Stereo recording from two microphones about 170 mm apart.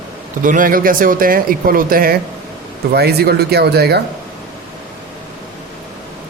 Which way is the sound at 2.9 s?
70° right (ahead or behind).